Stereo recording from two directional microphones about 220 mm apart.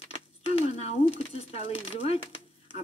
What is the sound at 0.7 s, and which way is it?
Speech, 30° left (ahead or behind).